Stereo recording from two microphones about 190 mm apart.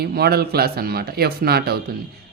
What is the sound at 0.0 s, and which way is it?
Speech, 55° right (ahead or behind).